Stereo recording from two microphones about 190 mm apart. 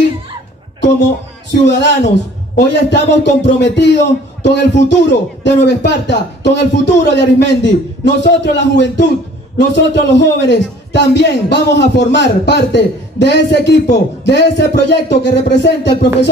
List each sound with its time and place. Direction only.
1.5 s a man's voice: 65° left (ahead or behind)